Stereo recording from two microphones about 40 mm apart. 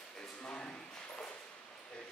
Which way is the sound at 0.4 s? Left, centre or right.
Left.